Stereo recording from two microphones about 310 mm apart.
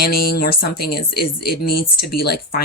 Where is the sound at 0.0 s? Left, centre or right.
Left.